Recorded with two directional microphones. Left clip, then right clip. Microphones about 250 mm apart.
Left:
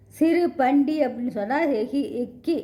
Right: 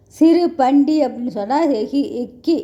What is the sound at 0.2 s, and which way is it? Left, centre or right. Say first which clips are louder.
A woman's voice: right 7 dB; centre.